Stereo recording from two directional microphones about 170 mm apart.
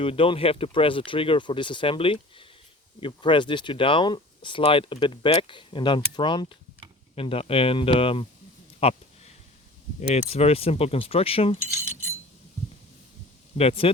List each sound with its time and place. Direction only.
0.0 s speech: 30° left (ahead or behind)
8.8 s a sound: 35° left (ahead or behind)
10.0 s speech: 35° left (ahead or behind)
13.6 s speech: 35° left (ahead or behind)